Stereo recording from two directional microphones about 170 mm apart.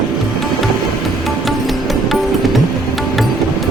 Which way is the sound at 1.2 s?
Centre (ahead or behind).